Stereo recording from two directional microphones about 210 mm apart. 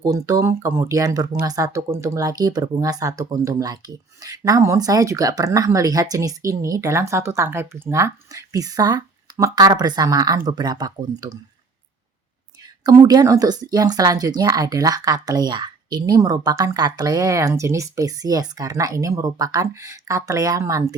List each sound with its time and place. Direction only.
0.0 s speech: 15° right (ahead or behind)
12.6 s speech: 20° right (ahead or behind)